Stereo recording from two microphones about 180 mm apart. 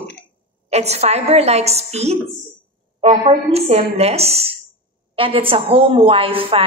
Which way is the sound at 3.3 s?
35° right (ahead or behind).